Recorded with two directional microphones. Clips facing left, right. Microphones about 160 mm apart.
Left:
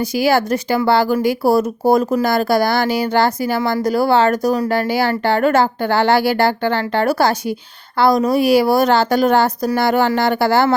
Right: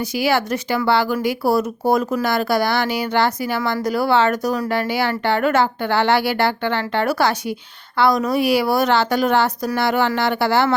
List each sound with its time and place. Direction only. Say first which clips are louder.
0.2 s speech: left 4 dB; 40° left (ahead or behind)